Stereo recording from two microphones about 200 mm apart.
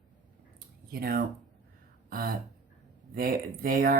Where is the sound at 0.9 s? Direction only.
45° right (ahead or behind).